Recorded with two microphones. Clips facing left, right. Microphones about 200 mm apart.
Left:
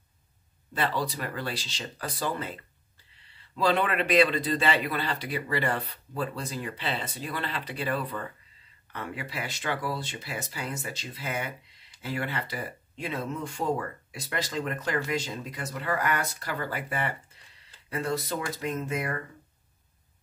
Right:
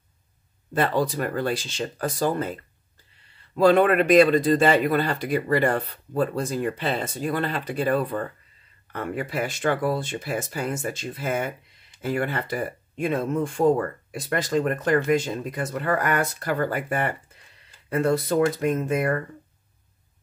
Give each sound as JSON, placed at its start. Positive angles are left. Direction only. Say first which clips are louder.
{"t": 0.7, "sound": "speech", "louder": "right 7 dB", "side_deg": -50}